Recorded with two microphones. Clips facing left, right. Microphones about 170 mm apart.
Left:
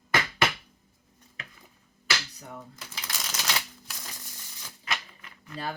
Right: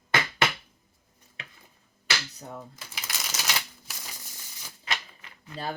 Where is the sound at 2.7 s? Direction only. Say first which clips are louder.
Even; 5° right (ahead or behind).